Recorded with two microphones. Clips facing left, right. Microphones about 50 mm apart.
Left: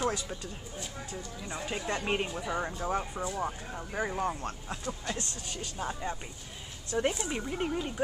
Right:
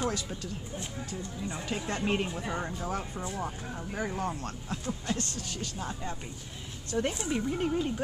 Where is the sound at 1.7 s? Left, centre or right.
Centre.